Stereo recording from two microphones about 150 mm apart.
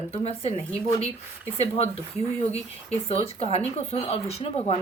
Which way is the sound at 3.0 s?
45° left (ahead or behind).